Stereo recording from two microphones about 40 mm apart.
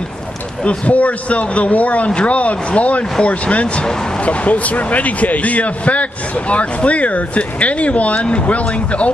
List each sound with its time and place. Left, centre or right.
0.7 s speech: left